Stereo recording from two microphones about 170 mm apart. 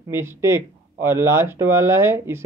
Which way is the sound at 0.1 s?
15° right (ahead or behind).